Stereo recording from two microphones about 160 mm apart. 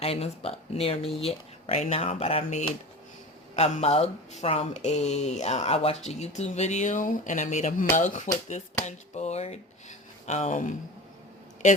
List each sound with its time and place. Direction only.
0.0 s speech: 40° left (ahead or behind)